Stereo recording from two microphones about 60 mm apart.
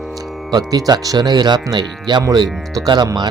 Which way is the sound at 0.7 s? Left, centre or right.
Right.